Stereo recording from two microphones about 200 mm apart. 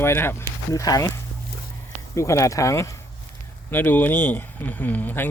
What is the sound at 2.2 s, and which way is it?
Speech, 15° left (ahead or behind).